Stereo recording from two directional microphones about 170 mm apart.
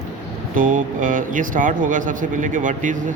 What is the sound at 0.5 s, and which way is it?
Speech, 55° right (ahead or behind).